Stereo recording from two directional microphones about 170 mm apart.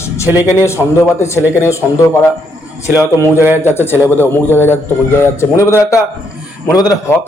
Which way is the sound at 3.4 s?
15° right (ahead or behind).